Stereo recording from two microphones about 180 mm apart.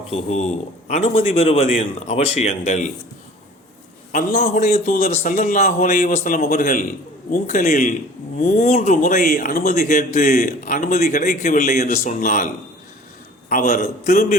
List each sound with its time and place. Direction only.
0.1 s a man's voice: 35° left (ahead or behind)
4.1 s speech: 50° left (ahead or behind)
13.5 s speech: 50° left (ahead or behind)